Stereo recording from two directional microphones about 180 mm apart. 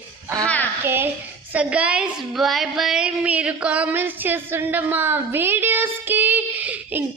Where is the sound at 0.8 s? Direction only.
10° right (ahead or behind).